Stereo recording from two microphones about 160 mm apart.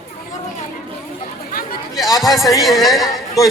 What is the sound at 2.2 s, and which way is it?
Speech, centre (ahead or behind).